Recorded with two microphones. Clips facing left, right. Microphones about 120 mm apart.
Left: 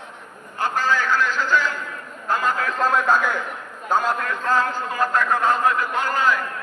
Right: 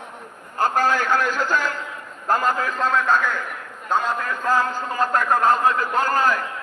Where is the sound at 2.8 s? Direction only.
10° left (ahead or behind).